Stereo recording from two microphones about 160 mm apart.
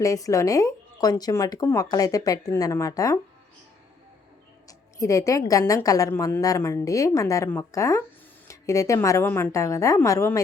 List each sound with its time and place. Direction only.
0.0 s speech: 20° left (ahead or behind)
4.9 s speech: 20° left (ahead or behind)